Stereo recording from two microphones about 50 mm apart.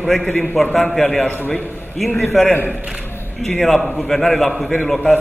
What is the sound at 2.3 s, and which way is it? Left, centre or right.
A man's voice, centre.